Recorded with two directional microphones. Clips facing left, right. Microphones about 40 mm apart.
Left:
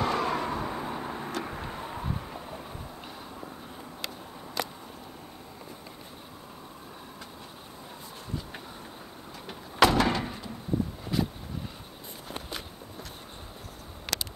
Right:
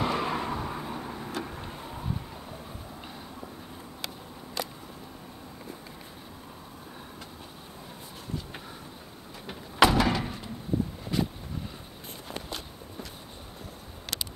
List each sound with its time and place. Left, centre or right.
0.0 s vehicle: centre
0.6 s vehicle: centre
9.5 s door: centre
11.1 s vehicle: centre
14.1 s a sound: left